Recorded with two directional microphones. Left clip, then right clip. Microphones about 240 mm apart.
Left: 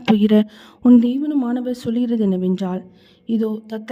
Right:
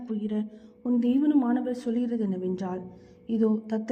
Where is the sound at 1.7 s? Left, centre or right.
Left.